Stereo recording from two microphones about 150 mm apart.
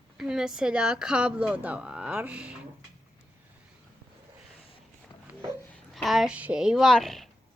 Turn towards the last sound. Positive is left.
turn(degrees=0)  # may be behind; listen again after turning